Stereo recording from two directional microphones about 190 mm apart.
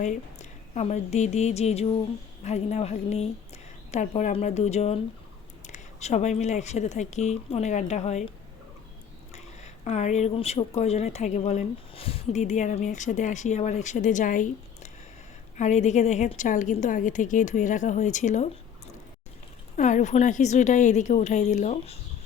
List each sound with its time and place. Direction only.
0.0 s a woman's voice: 40° left (ahead or behind)
9.3 s speech: 35° left (ahead or behind)
15.5 s speech: 40° left (ahead or behind)
19.7 s speech: 40° left (ahead or behind)